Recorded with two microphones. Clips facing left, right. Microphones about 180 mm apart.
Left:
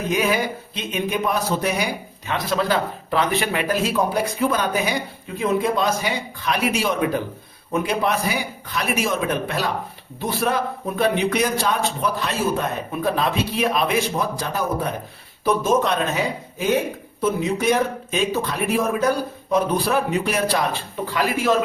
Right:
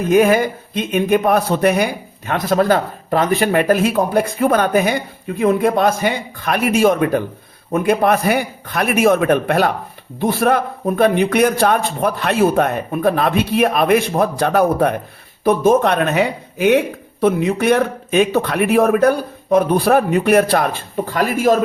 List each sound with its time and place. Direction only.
0.1 s a man's voice: 50° right (ahead or behind)